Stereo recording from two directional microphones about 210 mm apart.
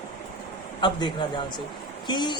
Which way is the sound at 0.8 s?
20° left (ahead or behind).